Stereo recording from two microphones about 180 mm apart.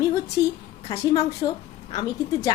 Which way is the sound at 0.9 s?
20° left (ahead or behind).